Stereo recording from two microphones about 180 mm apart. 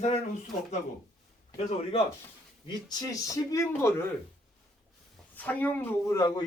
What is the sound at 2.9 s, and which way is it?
Speech, 20° left (ahead or behind).